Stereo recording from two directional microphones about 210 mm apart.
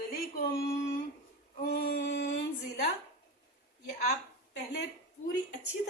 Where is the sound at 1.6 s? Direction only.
45° left (ahead or behind).